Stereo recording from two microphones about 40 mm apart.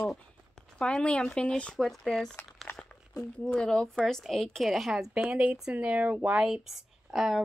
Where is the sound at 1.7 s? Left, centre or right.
Centre.